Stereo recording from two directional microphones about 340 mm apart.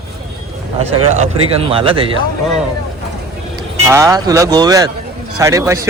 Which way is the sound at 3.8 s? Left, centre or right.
Centre.